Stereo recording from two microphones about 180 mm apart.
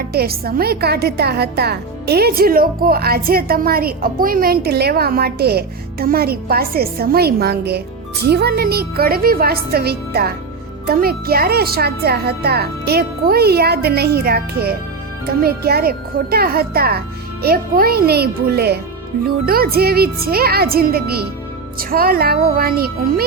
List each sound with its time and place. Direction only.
0.1 s a woman's voice: 60° right (ahead or behind)